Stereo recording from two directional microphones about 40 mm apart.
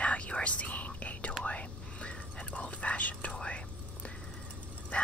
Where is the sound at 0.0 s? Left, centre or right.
Left.